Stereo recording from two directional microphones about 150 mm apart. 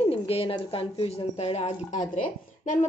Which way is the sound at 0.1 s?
40° left (ahead or behind).